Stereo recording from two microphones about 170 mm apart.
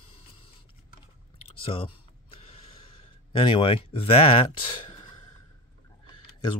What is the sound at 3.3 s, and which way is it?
Speech, 30° left (ahead or behind).